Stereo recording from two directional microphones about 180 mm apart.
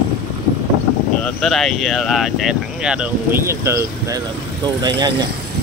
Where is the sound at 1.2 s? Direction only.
5° left (ahead or behind); by 5.2 s 25° right (ahead or behind).